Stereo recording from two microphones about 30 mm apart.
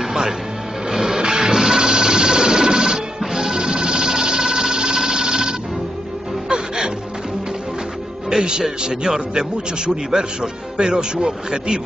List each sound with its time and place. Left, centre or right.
0.0 s music: right
1.1 s a sound: right
3.2 s music: centre
3.5 s sewing machine: right
8.3 s a man's voice: right